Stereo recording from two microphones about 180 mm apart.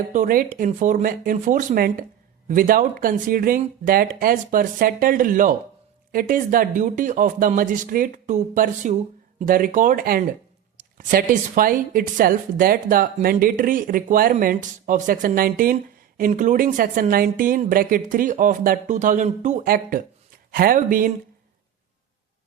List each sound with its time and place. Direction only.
0.1 s speech: 50° right (ahead or behind)